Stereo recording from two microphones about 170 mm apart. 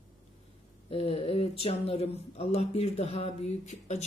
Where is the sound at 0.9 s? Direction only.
35° left (ahead or behind).